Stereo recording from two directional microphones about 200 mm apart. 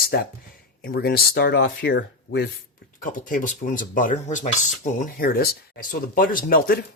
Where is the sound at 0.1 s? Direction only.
50° left (ahead or behind).